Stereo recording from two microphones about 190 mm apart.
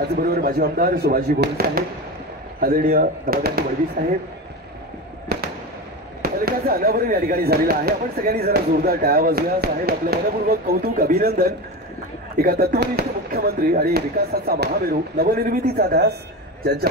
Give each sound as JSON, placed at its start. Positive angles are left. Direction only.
{"t": 0.1, "sound": "speech", "side_deg": -50}
{"t": 5.3, "sound": "fireworks", "side_deg": -60}
{"t": 6.2, "sound": "speech", "side_deg": -55}